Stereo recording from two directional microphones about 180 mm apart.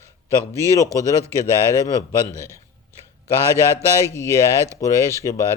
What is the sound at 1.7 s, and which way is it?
Speech, 20° left (ahead or behind).